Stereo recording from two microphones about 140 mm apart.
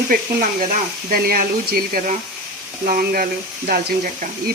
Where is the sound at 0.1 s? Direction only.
90° right.